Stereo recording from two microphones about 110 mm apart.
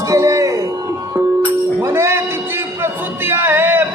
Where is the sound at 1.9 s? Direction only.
25° right (ahead or behind).